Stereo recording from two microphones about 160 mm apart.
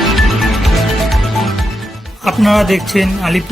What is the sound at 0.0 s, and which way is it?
Music, centre (ahead or behind).